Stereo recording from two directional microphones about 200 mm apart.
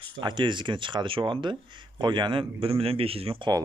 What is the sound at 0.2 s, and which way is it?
Speech, 20° right (ahead or behind).